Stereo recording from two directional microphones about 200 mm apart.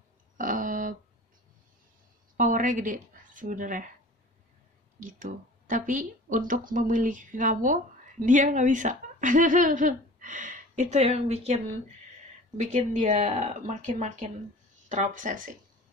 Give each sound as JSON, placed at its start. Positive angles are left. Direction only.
{"t": 0.4, "sound": "a sound", "side_deg": -40}
{"t": 2.3, "sound": "a woman's voice", "side_deg": -40}
{"t": 5.0, "sound": "speech", "side_deg": -40}